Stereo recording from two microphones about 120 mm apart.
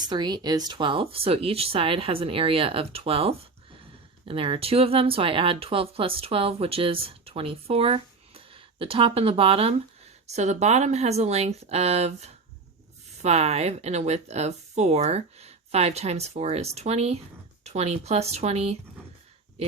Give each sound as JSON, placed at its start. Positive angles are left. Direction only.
{"t": 0.1, "sound": "speech", "side_deg": -35}
{"t": 10.2, "sound": "speech", "side_deg": -70}